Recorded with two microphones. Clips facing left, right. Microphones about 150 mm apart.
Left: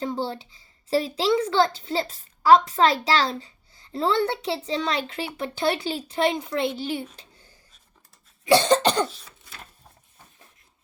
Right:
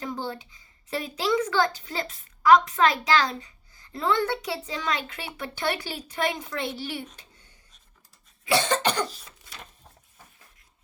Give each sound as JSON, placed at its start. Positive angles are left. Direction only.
{"t": 0.0, "sound": "a woman's voice", "side_deg": 30}
{"t": 7.2, "sound": "a sound", "side_deg": 35}
{"t": 8.4, "sound": "cough", "side_deg": 35}